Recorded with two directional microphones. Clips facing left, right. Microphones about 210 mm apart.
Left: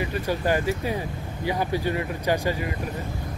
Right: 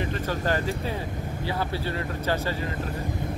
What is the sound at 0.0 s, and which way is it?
Speech, 10° left (ahead or behind).